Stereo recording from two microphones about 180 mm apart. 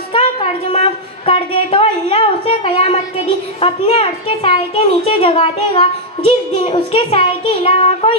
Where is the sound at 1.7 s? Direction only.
30° left (ahead or behind).